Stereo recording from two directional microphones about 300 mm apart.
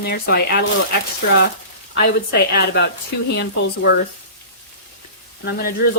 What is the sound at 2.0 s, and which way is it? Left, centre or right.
Speech, left.